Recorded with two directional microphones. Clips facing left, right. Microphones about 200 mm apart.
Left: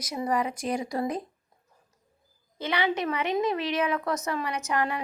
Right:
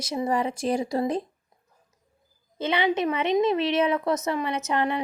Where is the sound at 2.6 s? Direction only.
20° right (ahead or behind).